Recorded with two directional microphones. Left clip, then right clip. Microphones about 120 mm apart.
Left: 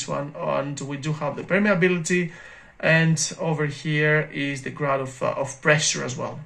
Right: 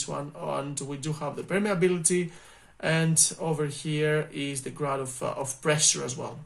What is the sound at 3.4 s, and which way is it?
Speech, 30° right (ahead or behind).